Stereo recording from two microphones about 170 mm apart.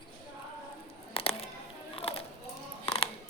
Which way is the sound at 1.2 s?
30° left (ahead or behind).